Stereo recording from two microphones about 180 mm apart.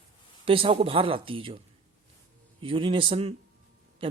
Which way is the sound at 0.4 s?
30° right (ahead or behind).